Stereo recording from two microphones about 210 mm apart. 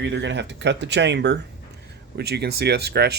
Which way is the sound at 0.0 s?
55° right (ahead or behind).